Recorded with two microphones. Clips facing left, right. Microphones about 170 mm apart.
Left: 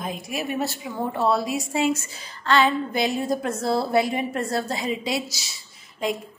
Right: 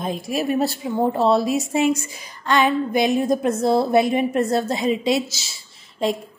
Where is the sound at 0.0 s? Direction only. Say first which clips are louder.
Right 6 dB; 35° right (ahead or behind).